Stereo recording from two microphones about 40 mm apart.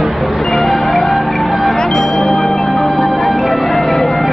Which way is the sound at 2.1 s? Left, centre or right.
Centre.